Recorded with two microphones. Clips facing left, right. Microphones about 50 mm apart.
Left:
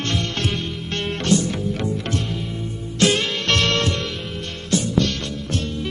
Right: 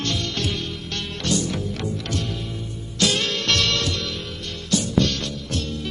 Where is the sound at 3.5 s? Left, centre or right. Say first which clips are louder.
Left 3 dB; left.